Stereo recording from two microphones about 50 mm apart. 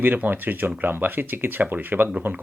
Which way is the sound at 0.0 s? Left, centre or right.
Right.